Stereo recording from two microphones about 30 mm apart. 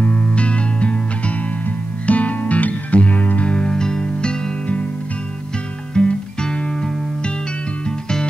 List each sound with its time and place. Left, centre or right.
0.0 s music: left
2.0 s music: left
3.5 s music: left
5.9 s music: left